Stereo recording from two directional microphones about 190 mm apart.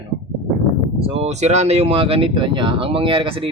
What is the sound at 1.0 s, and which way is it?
Speech, 35° right (ahead or behind).